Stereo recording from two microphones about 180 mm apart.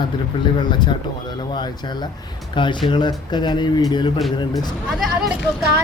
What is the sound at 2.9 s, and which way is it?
Speech, 25° left (ahead or behind).